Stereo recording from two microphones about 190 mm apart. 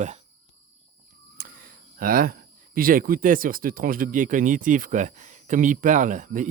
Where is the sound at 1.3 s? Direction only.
50° right (ahead or behind).